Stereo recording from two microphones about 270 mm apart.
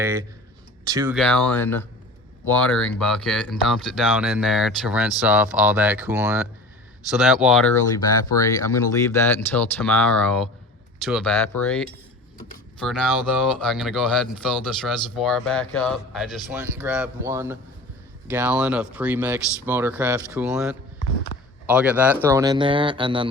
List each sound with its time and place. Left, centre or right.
0.0 s speech: centre
1.1 s speech: centre
8.3 s speech: centre
21.3 s a sound: left
21.7 s speech: centre